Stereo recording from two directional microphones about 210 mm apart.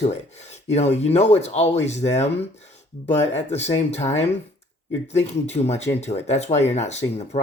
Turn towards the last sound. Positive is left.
turn(degrees=30)  # may be behind; listen again after turning